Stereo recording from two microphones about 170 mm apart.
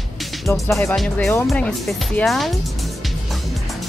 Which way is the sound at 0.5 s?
15° left (ahead or behind).